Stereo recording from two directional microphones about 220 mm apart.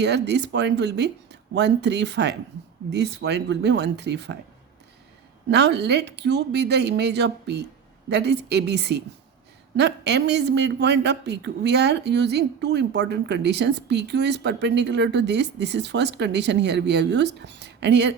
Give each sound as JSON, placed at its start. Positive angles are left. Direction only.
{"t": 0.0, "sound": "a man's voice", "side_deg": -50}
{"t": 5.5, "sound": "a man's voice", "side_deg": -50}